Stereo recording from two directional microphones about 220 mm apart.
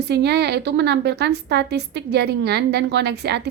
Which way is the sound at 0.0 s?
50° right (ahead or behind).